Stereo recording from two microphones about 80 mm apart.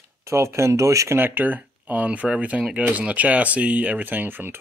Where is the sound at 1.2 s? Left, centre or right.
Right.